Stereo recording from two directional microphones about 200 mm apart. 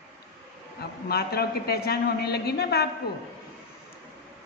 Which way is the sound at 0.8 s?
50° left (ahead or behind).